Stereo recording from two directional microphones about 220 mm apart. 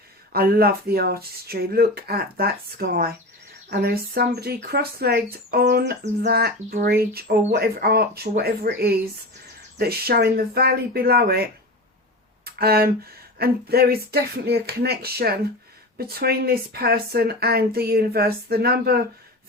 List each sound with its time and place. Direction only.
0.3 s speech: 45° right (ahead or behind)
12.5 s speech: 45° right (ahead or behind)